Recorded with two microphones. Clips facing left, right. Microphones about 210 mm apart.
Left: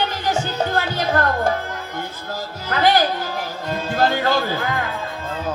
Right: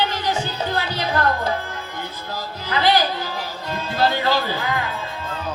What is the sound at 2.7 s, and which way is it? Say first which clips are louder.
A woman's voice: left 2 dB; 50° left (ahead or behind).